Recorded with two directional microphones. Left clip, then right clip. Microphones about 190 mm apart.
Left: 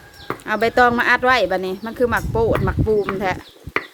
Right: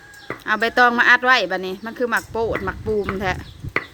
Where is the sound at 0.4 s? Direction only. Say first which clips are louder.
Left 1 dB; centre (ahead or behind).